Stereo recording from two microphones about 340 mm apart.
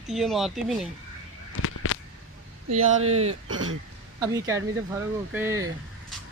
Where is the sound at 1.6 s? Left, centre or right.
Left.